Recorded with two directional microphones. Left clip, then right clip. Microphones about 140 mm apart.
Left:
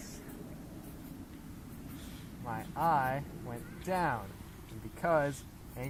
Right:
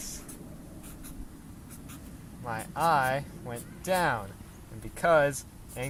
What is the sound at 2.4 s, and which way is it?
Speech, 50° right (ahead or behind).